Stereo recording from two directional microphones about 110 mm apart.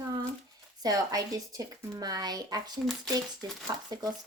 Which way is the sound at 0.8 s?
35° right (ahead or behind).